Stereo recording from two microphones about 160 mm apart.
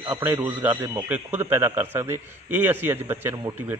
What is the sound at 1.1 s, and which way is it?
A man's voice, 15° right (ahead or behind).